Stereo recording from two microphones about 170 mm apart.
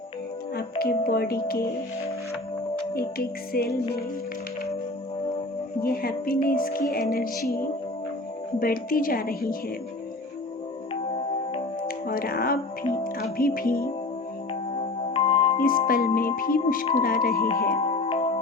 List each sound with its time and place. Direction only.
0.5 s music: 60° left (ahead or behind)
2.9 s music: 60° left (ahead or behind)
5.8 s music: 60° left (ahead or behind)
11.1 s music: 30° left (ahead or behind)
12.0 s music: 60° left (ahead or behind)
14.8 s music: 35° left (ahead or behind)
15.5 s music: 55° left (ahead or behind)
17.7 s music: 35° left (ahead or behind)